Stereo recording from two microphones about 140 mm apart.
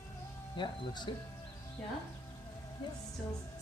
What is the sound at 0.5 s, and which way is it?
Speech, 35° left (ahead or behind).